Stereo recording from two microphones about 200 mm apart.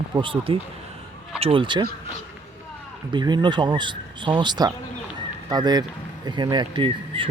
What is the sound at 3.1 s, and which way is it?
Speech, 20° right (ahead or behind).